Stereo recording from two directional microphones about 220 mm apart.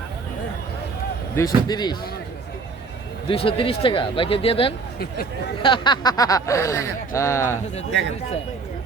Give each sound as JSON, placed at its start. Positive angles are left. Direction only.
{"t": 1.4, "sound": "speech", "side_deg": 20}
{"t": 3.2, "sound": "speech", "side_deg": 25}